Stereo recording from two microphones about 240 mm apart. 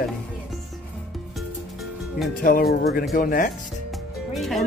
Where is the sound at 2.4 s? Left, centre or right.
Left.